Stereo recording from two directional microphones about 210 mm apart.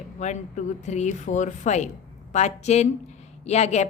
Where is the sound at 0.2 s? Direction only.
35° left (ahead or behind).